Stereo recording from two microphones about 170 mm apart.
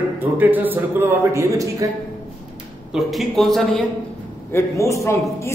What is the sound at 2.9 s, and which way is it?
Speech, centre (ahead or behind).